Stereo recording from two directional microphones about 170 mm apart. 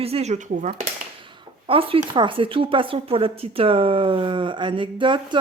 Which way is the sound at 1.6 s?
30° right (ahead or behind).